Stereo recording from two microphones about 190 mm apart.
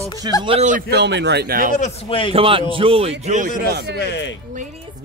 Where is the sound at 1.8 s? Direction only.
30° left (ahead or behind).